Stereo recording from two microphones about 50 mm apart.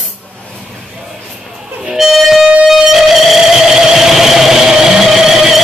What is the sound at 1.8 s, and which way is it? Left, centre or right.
Music, centre.